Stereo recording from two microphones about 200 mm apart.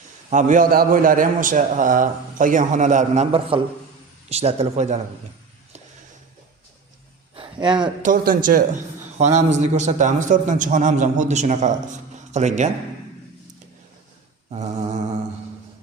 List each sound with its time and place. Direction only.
0.3 s a man's voice: 40° right (ahead or behind)
7.3 s a sound: 25° right (ahead or behind)
8.0 s a man's voice: 45° right (ahead or behind)